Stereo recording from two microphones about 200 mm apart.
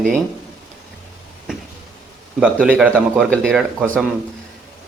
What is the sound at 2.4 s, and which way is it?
A man's voice, 5° right (ahead or behind).